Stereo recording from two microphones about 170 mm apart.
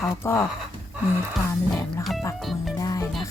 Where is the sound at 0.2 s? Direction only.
15° left (ahead or behind).